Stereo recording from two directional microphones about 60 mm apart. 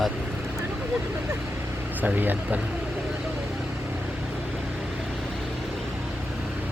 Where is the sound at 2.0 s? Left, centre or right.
Right.